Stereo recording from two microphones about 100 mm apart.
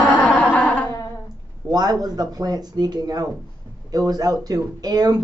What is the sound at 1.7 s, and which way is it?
Speech, 40° right (ahead or behind).